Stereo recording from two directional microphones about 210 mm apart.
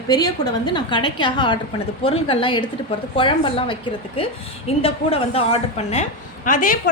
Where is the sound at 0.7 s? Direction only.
25° left (ahead or behind); by 6.8 s 40° left (ahead or behind).